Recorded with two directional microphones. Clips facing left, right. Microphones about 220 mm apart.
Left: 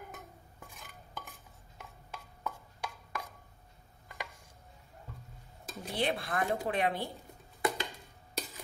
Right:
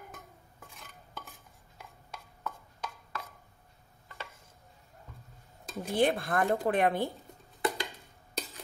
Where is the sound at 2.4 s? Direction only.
10° left (ahead or behind).